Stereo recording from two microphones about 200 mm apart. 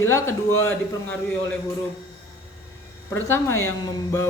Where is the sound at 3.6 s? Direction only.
15° left (ahead or behind).